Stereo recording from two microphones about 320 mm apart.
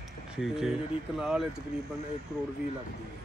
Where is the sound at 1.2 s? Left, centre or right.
Centre.